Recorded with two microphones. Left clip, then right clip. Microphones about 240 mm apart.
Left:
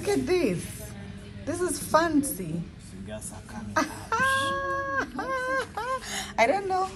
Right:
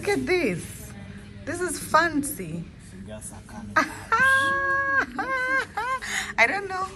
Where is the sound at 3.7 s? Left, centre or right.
Centre.